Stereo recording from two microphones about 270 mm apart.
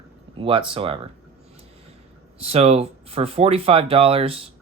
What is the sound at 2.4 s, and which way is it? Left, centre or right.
Speech, right.